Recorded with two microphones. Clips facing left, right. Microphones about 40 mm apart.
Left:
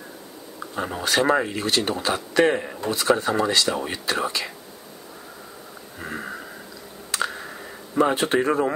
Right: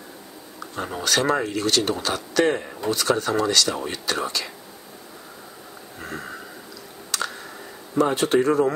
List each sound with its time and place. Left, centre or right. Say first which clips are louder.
0.6 s speech: left 1 dB; centre
2.4 s speech: left 2 dB; centre
2.9 s speech: left 1 dB; left
5.9 s a sound: left 2 dB; centre
7.1 s a sound: left 2 dB; left
8.0 s speech: right 1 dB; left